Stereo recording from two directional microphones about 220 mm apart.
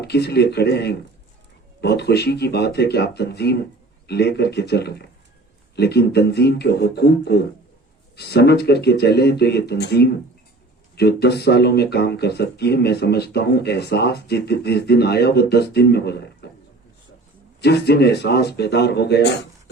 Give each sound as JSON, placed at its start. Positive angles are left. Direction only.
{"t": 0.0, "sound": "speech", "side_deg": 45}
{"t": 17.6, "sound": "speech", "side_deg": 50}